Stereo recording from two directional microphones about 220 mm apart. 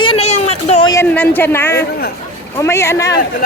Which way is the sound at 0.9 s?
10° left (ahead or behind).